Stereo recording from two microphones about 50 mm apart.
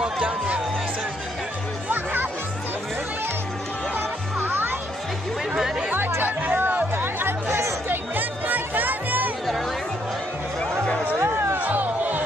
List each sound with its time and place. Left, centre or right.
3.9 s music: right
5.9 s music: right
7.9 s music: right
11.5 s a sound: right